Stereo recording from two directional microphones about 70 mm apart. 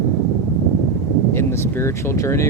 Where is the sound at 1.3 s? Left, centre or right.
Left.